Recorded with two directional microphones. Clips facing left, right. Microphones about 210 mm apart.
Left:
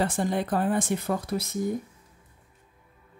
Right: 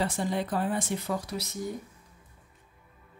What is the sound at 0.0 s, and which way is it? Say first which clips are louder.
Speech: left 3 dB; 50° left (ahead or behind).